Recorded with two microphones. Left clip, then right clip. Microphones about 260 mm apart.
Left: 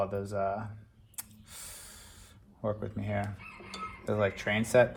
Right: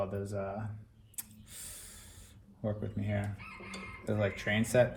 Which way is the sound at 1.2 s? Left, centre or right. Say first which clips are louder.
Left 2 dB; left.